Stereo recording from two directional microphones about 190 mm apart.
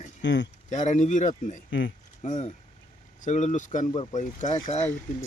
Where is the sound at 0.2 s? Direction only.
70° left (ahead or behind).